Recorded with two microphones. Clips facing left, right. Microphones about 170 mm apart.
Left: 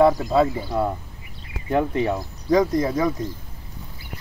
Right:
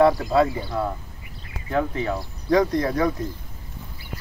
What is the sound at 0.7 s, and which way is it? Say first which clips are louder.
Speech: left 3 dB; 20° left (ahead or behind).